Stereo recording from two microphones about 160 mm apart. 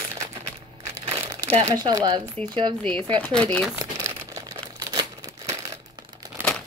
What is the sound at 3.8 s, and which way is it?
Crumpling, 20° right (ahead or behind).